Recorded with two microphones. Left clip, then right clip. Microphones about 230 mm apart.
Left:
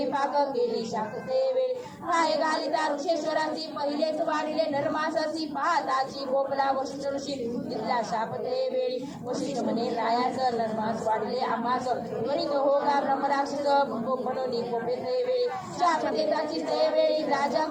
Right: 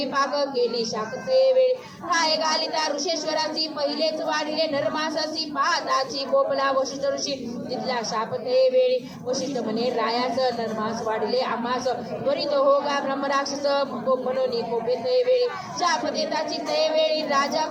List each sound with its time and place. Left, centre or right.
0.2 s a woman's voice: right
7.9 s a woman's voice: right
12.5 s a woman's voice: right
15.1 s a woman's voice: right